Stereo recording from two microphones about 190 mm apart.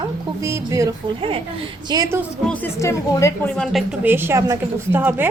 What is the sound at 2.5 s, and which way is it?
A woman's voice, 10° left (ahead or behind).